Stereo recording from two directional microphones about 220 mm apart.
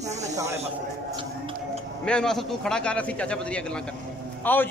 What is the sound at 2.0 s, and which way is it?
A man's voice, 5° left (ahead or behind).